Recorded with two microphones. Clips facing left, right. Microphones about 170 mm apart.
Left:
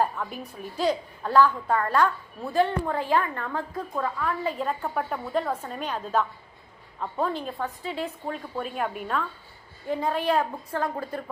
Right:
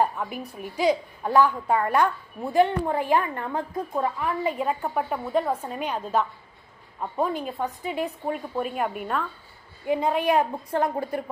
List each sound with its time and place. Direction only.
0.0 s a woman's voice: 15° right (ahead or behind)
9.8 s a woman's voice: 15° right (ahead or behind)